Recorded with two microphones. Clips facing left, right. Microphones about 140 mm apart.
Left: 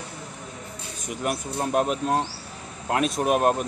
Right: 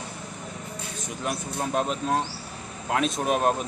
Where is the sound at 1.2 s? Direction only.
5° left (ahead or behind).